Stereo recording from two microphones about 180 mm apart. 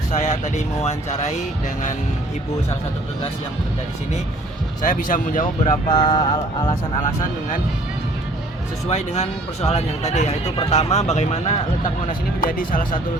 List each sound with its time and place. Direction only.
0.1 s speech: 40° left (ahead or behind)
4.8 s speech: 45° left (ahead or behind)
5.9 s speech: 30° left (ahead or behind)
8.9 s speech: 40° left (ahead or behind)